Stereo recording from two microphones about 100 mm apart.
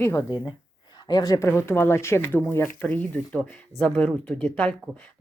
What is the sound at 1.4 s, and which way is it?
A woman's voice, 25° left (ahead or behind).